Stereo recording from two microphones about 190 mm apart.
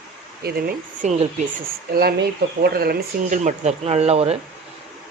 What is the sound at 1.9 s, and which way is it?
Speech, 55° right (ahead or behind).